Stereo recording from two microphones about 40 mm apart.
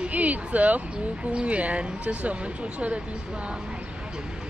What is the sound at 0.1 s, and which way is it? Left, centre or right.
Speech, right.